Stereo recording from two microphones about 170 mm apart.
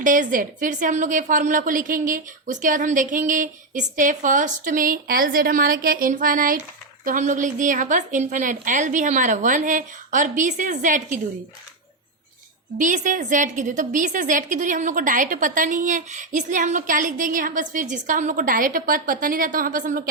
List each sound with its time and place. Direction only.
0.0 s a woman's voice: 50° right (ahead or behind)
12.7 s a woman's voice: 50° right (ahead or behind)